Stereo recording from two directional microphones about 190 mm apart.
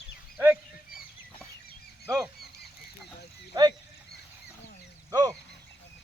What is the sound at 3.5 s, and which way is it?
Cricket, 20° right (ahead or behind).